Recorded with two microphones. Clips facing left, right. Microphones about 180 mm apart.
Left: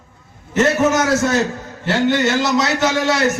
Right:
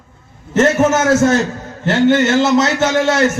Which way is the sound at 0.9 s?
50° right (ahead or behind).